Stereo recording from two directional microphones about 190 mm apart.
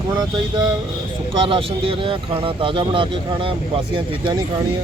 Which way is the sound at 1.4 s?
30° right (ahead or behind).